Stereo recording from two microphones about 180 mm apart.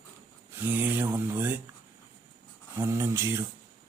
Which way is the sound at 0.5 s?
10° right (ahead or behind).